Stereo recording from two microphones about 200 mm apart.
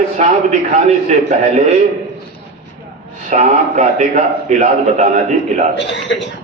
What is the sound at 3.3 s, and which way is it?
A man's voice, 30° right (ahead or behind).